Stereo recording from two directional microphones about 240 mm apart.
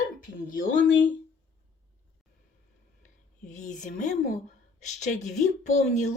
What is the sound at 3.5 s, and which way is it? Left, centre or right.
Speech, left.